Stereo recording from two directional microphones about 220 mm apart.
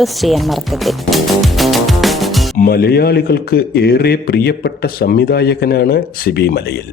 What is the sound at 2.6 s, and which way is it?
A man's voice, 45° left (ahead or behind).